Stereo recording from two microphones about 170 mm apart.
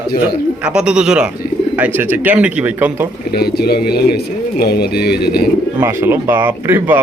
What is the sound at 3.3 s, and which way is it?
Speech, 70° left (ahead or behind).